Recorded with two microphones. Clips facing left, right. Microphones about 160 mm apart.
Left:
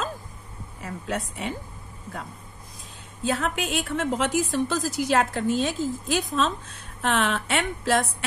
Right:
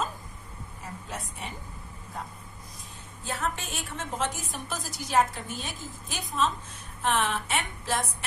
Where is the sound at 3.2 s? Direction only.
75° left (ahead or behind).